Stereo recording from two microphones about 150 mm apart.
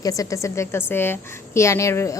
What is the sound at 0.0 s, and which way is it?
A woman's voice, 25° left (ahead or behind).